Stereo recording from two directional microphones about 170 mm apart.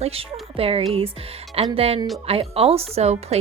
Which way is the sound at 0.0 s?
35° right (ahead or behind).